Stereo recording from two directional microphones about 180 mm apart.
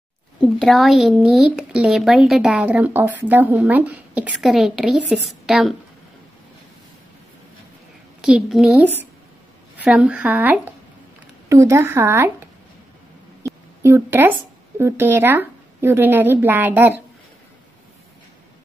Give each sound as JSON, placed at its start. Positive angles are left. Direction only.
{"t": 0.4, "sound": "speech", "side_deg": 0}
{"t": 8.2, "sound": "speech", "side_deg": -5}
{"t": 13.8, "sound": "speech", "side_deg": -10}